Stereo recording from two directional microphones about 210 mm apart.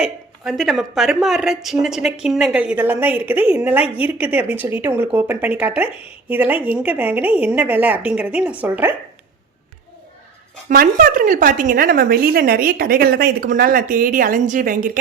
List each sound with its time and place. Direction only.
0.0 s a woman's voice: centre (ahead or behind)
10.7 s a woman's voice: 40° right (ahead or behind)